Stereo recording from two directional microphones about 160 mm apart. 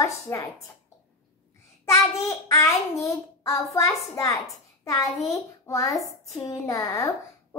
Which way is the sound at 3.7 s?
20° left (ahead or behind).